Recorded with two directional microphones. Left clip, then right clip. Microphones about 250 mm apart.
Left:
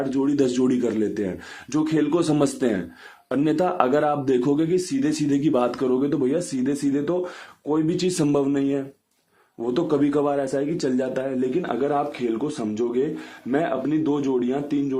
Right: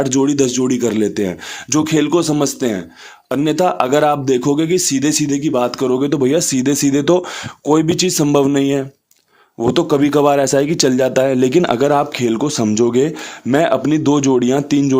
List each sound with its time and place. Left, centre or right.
0.0 s speech: right